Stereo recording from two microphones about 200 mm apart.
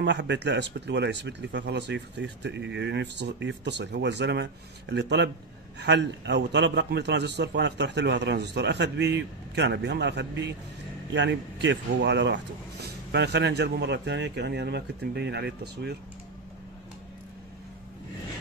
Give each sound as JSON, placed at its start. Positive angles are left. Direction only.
{"t": 0.0, "sound": "speech", "side_deg": -60}